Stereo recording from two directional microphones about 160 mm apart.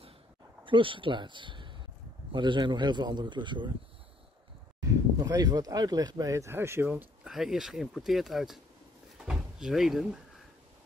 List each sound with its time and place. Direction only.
0.7 s a man's voice: 30° right (ahead or behind)
4.7 s speech: 20° right (ahead or behind); by 8.5 s centre (ahead or behind)
9.2 s door: 5° right (ahead or behind)